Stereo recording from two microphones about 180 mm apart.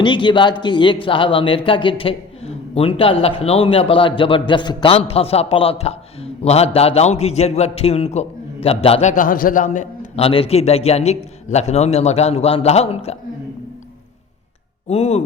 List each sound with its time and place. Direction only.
0.0 s a man's voice: 25° left (ahead or behind)
14.8 s a man's voice: 35° left (ahead or behind)